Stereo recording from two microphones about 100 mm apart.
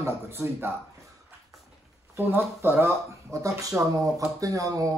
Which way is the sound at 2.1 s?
20° right (ahead or behind).